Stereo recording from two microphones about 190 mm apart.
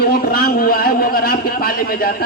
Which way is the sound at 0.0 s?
50° left (ahead or behind).